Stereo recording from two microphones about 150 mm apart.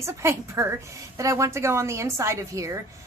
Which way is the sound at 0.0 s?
20° right (ahead or behind).